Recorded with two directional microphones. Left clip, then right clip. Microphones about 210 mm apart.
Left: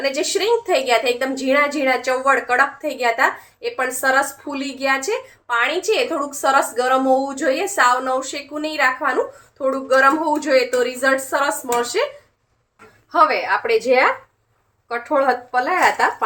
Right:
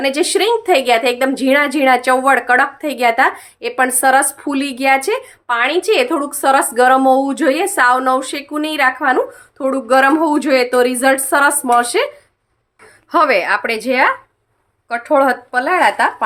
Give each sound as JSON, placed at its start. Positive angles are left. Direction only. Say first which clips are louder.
{"t": 0.0, "sound": "a woman's voice", "louder": "right 5 dB", "side_deg": -50}
{"t": 13.1, "sound": "a woman's voice", "louder": "right 3 dB", "side_deg": -45}